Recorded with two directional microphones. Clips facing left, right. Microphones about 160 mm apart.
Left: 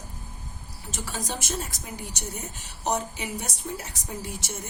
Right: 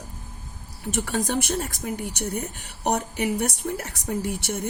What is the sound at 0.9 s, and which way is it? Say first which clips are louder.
Speech: right 8 dB; 60° right (ahead or behind).